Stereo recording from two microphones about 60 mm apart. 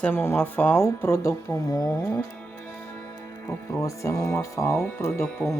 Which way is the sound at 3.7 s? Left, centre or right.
Left.